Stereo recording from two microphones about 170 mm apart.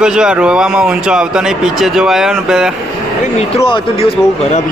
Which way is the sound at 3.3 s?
35° left (ahead or behind).